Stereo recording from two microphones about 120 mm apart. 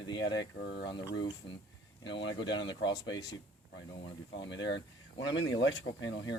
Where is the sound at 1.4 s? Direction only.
50° left (ahead or behind).